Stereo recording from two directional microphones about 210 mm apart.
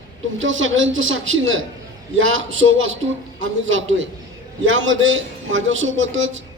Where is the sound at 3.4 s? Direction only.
65° right (ahead or behind).